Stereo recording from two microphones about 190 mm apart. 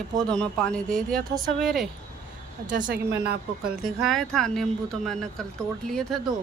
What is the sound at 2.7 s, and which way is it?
Speech, 45° right (ahead or behind).